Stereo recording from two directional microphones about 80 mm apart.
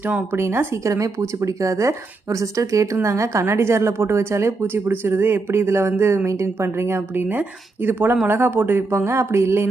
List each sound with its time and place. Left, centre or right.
0.3 s speech: right